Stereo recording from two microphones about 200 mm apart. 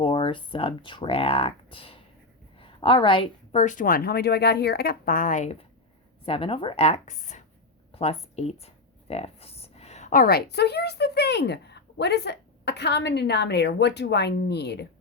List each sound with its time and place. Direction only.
0.0 s a woman's voice: 25° left (ahead or behind); by 14.8 s 55° left (ahead or behind)